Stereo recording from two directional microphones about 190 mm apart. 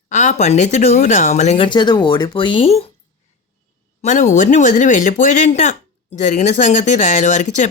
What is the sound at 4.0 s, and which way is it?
Speech, 40° left (ahead or behind).